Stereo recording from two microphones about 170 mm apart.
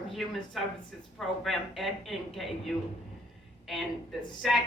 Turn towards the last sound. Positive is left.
turn(degrees=0)  # may be behind; listen again after turning